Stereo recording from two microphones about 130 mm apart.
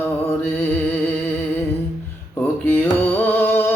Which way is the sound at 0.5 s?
15° left (ahead or behind).